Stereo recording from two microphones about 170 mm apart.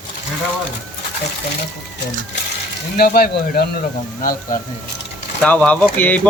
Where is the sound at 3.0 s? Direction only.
65° left (ahead or behind).